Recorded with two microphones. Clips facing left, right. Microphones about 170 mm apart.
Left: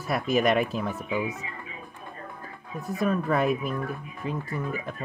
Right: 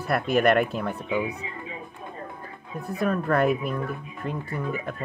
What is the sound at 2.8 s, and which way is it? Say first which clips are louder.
Speech: even; centre (ahead or behind).